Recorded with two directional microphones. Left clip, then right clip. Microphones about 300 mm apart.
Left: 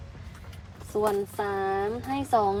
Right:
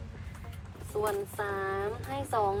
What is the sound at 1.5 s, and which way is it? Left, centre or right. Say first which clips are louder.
A woman's voice: left 5 dB; centre.